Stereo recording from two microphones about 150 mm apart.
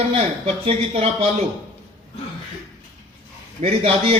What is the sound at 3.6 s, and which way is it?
Speech, 45° right (ahead or behind).